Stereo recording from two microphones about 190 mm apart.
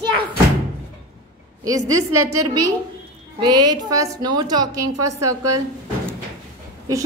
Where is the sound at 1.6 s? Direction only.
20° right (ahead or behind).